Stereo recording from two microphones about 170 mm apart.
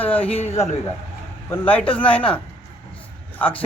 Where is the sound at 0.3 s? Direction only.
35° left (ahead or behind).